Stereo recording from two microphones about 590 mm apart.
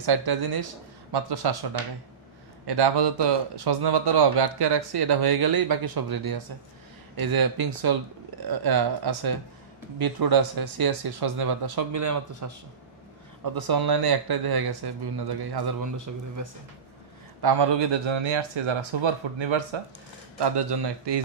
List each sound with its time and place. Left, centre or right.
0.0 s a man's voice: right
17.4 s a man's voice: right